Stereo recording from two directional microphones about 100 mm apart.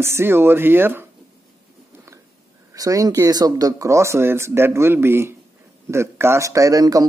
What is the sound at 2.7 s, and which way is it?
A man's voice, 35° right (ahead or behind).